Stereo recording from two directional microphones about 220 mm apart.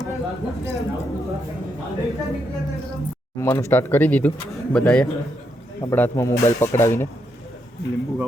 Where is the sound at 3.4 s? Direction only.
10° left (ahead or behind).